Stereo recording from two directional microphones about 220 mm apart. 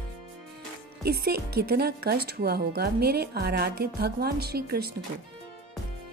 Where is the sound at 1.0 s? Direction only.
45° right (ahead or behind).